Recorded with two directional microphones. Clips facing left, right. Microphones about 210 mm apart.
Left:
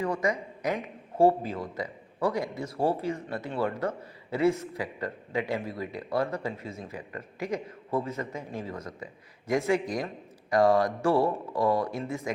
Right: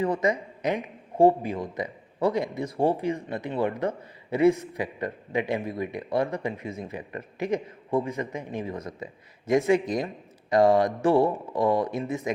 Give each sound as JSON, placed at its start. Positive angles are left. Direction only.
{"t": 0.0, "sound": "speech", "side_deg": -20}